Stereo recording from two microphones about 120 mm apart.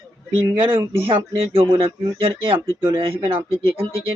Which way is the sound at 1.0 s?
50° right (ahead or behind).